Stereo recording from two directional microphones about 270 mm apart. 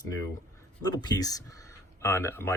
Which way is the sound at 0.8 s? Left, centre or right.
Centre.